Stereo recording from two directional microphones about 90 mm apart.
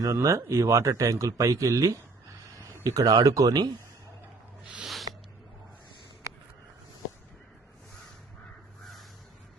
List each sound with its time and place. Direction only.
0.0 s speech: 35° right (ahead or behind)